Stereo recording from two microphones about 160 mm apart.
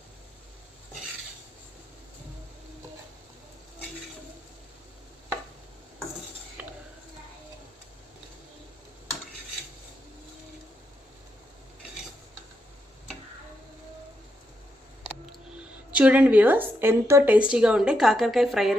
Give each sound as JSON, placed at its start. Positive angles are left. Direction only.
{"t": 15.9, "sound": "a woman's voice", "side_deg": -10}